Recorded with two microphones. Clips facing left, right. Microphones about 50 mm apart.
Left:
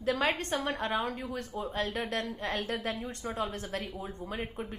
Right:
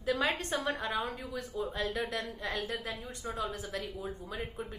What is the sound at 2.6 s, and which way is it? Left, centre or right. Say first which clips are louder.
Speech: left 4 dB; left.